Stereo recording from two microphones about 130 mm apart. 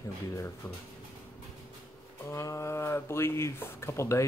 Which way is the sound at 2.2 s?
20° left (ahead or behind).